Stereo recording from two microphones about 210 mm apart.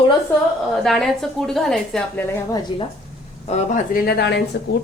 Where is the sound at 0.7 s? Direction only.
Centre (ahead or behind).